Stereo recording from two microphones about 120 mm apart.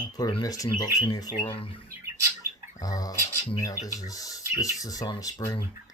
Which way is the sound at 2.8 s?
30° left (ahead or behind).